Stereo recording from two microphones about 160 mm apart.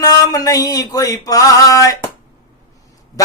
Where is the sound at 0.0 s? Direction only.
20° left (ahead or behind).